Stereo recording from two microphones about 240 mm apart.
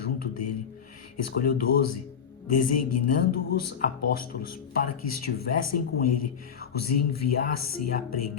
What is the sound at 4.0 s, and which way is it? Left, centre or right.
Speech, left.